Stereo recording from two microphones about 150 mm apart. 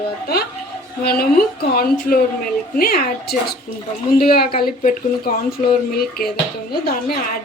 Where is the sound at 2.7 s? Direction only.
80° left.